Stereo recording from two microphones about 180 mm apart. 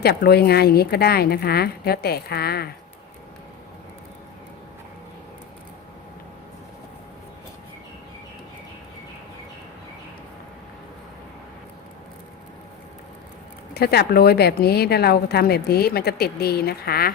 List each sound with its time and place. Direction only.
0.0 s a woman's voice: 60° left (ahead or behind)
13.7 s a woman's voice: 60° left (ahead or behind)